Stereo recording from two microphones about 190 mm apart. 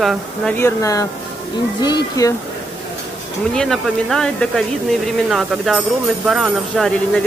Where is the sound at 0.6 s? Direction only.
15° left (ahead or behind).